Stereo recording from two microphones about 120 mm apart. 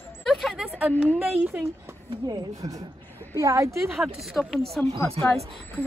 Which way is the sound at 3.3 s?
25° right (ahead or behind).